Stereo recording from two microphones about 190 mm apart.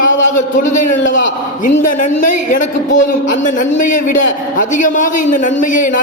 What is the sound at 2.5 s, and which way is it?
A man's voice, 45° left (ahead or behind).